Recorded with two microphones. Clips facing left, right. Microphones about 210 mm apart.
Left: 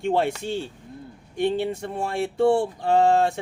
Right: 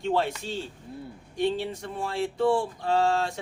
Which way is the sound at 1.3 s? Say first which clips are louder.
Left 4 dB; 55° left (ahead or behind).